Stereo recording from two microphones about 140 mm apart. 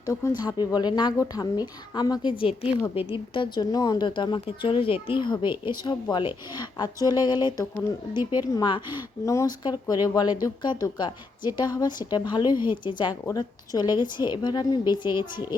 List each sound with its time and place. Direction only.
0.0 s speech: 25° left (ahead or behind)
2.4 s a woman's voice: 45° left (ahead or behind)